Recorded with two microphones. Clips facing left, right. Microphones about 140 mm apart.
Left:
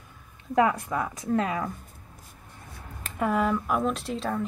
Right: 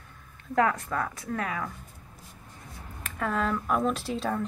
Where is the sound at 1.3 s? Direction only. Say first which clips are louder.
Left 8 dB; 25° left (ahead or behind).